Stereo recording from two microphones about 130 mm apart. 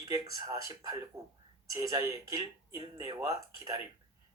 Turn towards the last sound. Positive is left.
turn(degrees=-25)  # may be behind; listen again after turning